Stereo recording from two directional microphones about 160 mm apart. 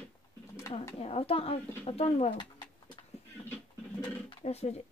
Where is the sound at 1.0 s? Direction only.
35° left (ahead or behind).